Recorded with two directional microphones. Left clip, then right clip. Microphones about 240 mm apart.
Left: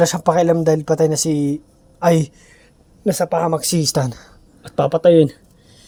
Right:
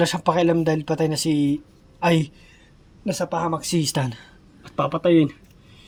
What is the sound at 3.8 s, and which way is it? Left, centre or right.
Speech, centre.